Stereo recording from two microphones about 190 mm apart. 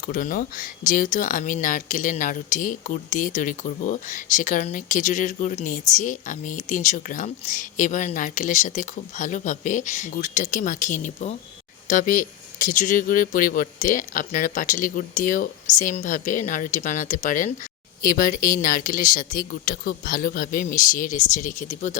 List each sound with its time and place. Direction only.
0.0 s speech: 45° left (ahead or behind)